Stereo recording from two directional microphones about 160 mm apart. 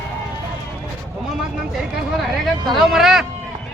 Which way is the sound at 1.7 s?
Centre (ahead or behind).